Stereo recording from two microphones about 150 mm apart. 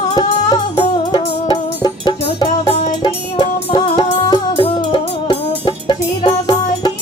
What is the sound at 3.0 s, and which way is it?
Music, 40° left (ahead or behind).